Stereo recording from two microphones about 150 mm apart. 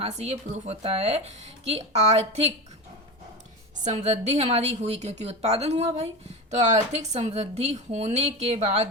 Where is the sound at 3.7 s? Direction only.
50° right (ahead or behind).